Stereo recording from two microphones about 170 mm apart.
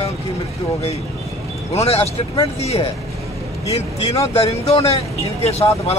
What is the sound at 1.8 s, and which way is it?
Speech, 35° left (ahead or behind).